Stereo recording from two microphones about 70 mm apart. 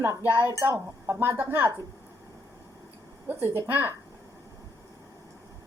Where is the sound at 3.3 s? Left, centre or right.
Right.